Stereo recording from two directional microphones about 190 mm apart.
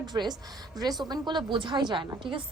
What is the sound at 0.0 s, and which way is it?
A woman's voice, 20° right (ahead or behind).